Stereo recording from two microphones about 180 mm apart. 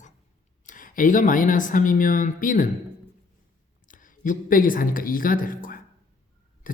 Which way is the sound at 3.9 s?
50° left (ahead or behind).